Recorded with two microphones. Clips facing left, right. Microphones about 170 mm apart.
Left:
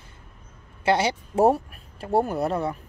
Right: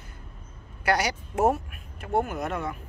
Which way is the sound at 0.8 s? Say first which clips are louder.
Left 3 dB; 25° left (ahead or behind).